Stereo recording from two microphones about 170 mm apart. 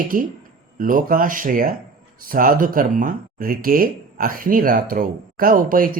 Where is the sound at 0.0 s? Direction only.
55° right (ahead or behind).